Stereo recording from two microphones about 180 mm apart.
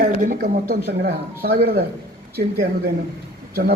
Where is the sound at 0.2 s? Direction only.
50° right (ahead or behind).